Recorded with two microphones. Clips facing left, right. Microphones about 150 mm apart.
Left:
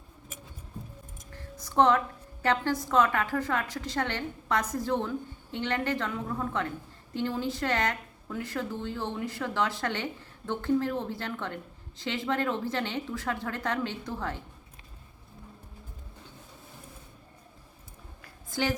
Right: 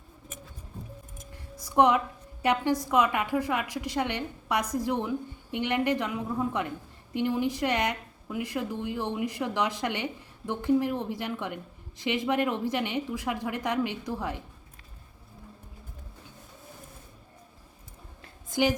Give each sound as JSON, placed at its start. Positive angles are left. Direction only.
{"t": 1.5, "sound": "music", "side_deg": -10}
{"t": 2.4, "sound": "speech", "side_deg": -15}
{"t": 18.2, "sound": "a sound", "side_deg": -20}